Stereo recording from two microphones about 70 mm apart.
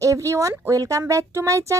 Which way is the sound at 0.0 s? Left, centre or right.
Right.